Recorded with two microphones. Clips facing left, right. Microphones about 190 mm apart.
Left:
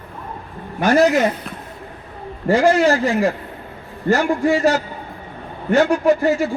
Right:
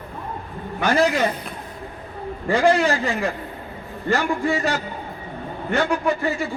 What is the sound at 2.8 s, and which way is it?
A man's voice, 40° left (ahead or behind).